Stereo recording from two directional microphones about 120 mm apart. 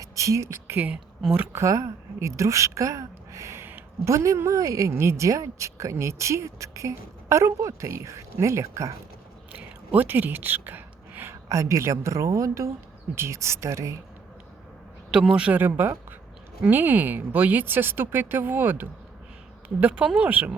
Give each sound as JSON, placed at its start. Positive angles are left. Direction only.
{"t": 0.0, "sound": "speech", "side_deg": -25}
{"t": 1.6, "sound": "a woman's voice", "side_deg": -25}
{"t": 9.5, "sound": "a woman's voice", "side_deg": -15}
{"t": 15.1, "sound": "speech", "side_deg": -5}